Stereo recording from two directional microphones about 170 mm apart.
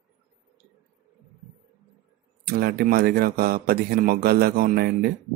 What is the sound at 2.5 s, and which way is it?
Speech, 65° right (ahead or behind).